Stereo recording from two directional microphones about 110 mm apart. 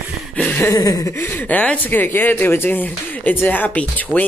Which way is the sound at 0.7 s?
35° left (ahead or behind).